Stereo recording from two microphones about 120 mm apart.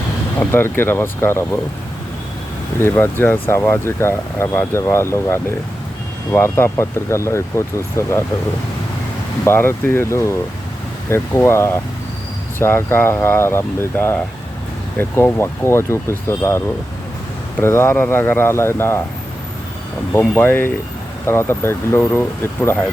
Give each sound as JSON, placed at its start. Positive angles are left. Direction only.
{"t": 0.3, "sound": "speech", "side_deg": 20}
{"t": 2.8, "sound": "speech", "side_deg": 20}
{"t": 9.4, "sound": "speech", "side_deg": 20}
{"t": 20.1, "sound": "speech", "side_deg": 20}